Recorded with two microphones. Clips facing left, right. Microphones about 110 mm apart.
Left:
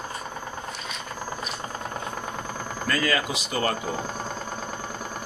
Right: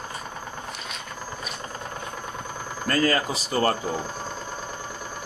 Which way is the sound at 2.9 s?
40° right (ahead or behind).